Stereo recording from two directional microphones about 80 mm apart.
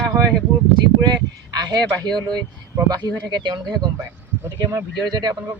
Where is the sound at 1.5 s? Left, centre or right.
Right.